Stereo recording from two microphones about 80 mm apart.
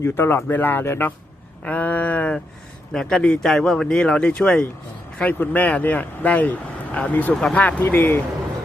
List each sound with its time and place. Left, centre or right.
0.0 s speech: left
2.9 s speech: centre
7.3 s speech: centre
7.6 s speech: centre